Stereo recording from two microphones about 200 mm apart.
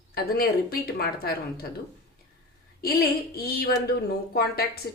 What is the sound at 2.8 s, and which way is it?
A woman's voice, 50° left (ahead or behind).